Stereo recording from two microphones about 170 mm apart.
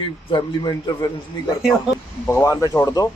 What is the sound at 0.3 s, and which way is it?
Speech, 25° left (ahead or behind).